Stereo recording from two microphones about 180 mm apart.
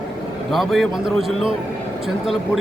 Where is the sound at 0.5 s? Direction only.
Centre (ahead or behind).